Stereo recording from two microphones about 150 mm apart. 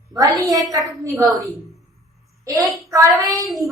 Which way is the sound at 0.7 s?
25° right (ahead or behind).